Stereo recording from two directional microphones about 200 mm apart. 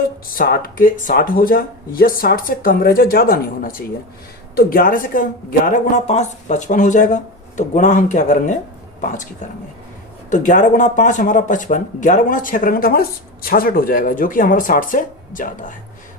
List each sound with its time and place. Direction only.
0.3 s speech: 50° left (ahead or behind)
10.3 s speech: 40° left (ahead or behind)